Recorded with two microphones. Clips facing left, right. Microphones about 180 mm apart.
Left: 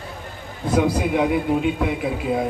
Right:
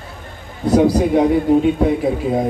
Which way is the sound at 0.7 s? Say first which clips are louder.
Right 6 dB; 40° right (ahead or behind).